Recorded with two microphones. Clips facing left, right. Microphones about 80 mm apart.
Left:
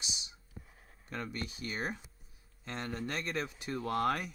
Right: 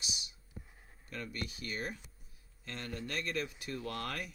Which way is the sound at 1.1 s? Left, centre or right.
Left.